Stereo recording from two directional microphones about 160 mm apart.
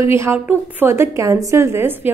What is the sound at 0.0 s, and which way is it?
A woman's voice, 15° right (ahead or behind).